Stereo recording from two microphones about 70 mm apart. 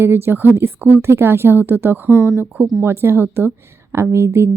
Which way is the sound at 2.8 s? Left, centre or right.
Right.